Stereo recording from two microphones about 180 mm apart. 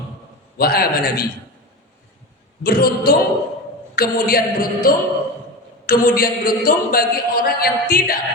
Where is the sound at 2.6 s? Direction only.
55° left (ahead or behind).